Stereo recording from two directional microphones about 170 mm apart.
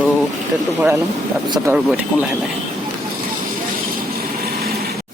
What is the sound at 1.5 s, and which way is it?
Speech, 15° right (ahead or behind).